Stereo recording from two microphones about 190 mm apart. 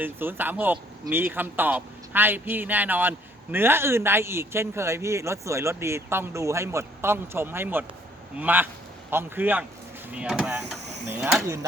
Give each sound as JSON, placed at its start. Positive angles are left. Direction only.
{"t": 0.0, "sound": "a man's voice", "side_deg": -10}